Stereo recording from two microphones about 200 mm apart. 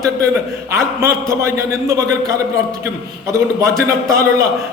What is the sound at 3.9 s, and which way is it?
Speech, 15° right (ahead or behind).